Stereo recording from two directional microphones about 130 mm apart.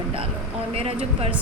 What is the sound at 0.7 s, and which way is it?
Speech, 50° right (ahead or behind).